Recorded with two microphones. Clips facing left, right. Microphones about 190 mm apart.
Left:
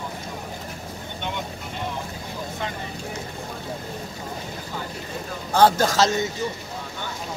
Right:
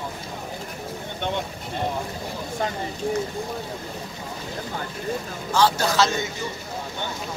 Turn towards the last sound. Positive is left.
turn(degrees=40)  # may be behind; listen again after turning